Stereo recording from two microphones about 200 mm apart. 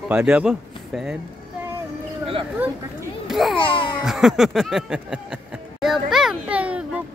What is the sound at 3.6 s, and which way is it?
Babbling, 25° left (ahead or behind).